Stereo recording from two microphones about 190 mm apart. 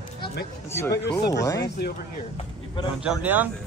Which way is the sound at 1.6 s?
55° left (ahead or behind).